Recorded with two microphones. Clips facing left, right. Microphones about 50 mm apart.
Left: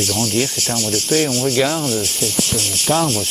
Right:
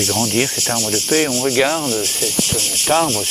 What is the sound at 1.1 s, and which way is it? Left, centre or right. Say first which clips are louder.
Speech: right 1 dB; right.